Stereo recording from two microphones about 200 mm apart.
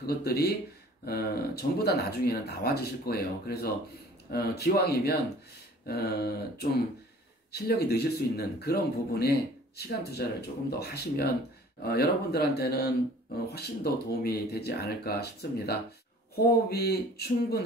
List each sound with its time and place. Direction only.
0.0 s speech: 50° left (ahead or behind)